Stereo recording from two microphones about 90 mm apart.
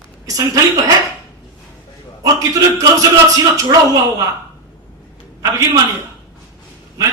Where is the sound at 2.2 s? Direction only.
40° right (ahead or behind).